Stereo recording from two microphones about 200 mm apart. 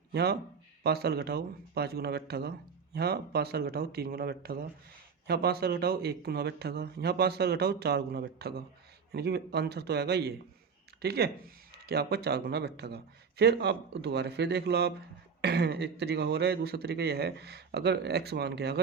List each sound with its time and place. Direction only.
0.1 s speech: 55° right (ahead or behind)